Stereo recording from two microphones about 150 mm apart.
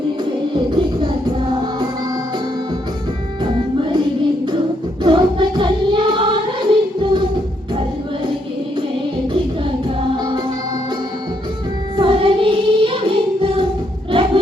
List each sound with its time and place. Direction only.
5.0 s choir: 35° right (ahead or behind)
11.9 s music: 35° right (ahead or behind)
14.1 s a sound: 35° right (ahead or behind)